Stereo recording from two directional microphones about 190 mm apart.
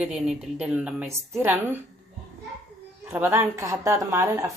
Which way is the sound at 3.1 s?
10° right (ahead or behind).